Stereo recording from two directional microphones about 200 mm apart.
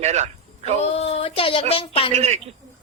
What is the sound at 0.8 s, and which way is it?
Speech, 30° left (ahead or behind).